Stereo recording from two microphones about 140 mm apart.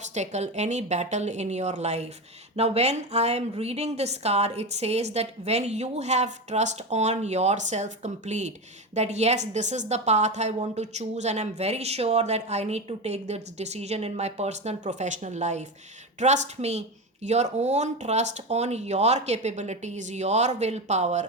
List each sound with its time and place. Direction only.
0.0 s a woman's voice: 55° right (ahead or behind)